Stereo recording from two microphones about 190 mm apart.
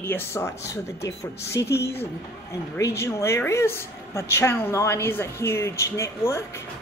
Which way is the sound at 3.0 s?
15° left (ahead or behind).